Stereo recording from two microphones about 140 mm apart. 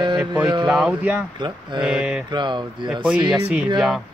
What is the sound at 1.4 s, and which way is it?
Speech, 30° right (ahead or behind).